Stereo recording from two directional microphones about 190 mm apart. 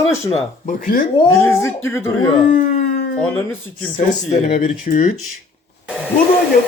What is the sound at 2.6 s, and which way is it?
Howl, 50° left (ahead or behind).